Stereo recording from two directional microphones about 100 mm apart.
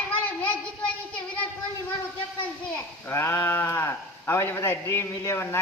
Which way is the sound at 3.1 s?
25° left (ahead or behind).